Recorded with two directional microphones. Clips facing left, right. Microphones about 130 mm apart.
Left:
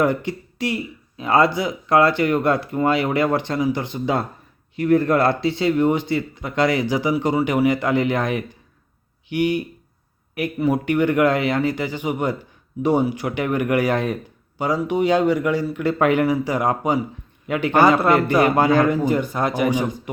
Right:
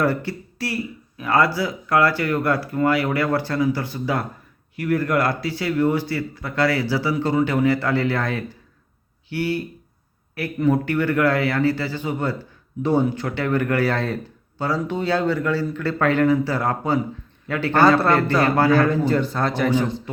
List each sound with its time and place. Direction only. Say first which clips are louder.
0.0 s a man's voice: left 2 dB; 20° left (ahead or behind)